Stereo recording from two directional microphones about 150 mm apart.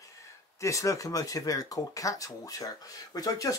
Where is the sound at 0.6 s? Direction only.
20° left (ahead or behind).